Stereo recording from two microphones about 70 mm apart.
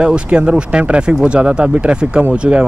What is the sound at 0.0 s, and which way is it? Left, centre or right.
Speech, centre.